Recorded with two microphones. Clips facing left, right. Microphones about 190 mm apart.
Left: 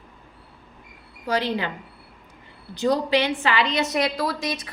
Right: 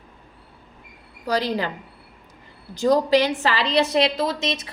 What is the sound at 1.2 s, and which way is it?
Speech, 40° right (ahead or behind).